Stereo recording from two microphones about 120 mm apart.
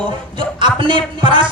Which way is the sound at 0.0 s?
45° right (ahead or behind).